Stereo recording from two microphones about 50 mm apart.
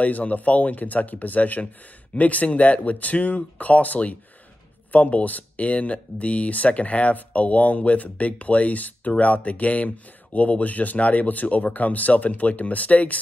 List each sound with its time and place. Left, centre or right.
0.0 s speech: left